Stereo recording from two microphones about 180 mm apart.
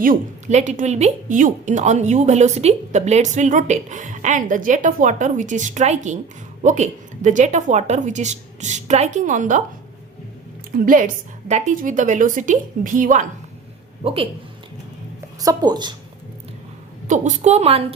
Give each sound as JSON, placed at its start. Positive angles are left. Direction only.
{"t": 0.0, "sound": "a woman's voice", "side_deg": -45}
{"t": 10.8, "sound": "a woman's voice", "side_deg": -45}
{"t": 14.0, "sound": "a woman's voice", "side_deg": -30}
{"t": 15.4, "sound": "a woman's voice", "side_deg": -20}
{"t": 17.1, "sound": "a woman's voice", "side_deg": -40}